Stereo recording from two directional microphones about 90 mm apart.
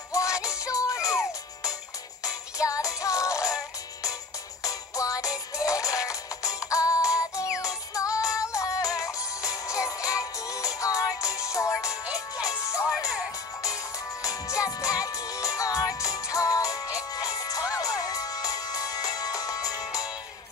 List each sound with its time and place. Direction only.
0.1 s music: 35° left (ahead or behind)
2.2 s music: 40° left (ahead or behind)
14.2 s music: 40° left (ahead or behind)